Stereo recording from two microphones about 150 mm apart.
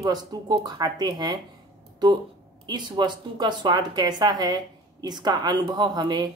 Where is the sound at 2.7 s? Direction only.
30° right (ahead or behind).